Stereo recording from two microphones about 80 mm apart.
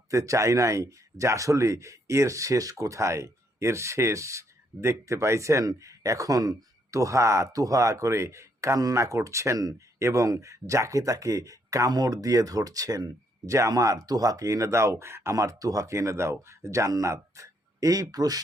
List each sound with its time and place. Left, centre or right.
0.1 s speech: right